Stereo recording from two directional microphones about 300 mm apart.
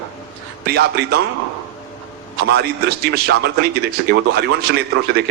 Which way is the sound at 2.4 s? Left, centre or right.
Right.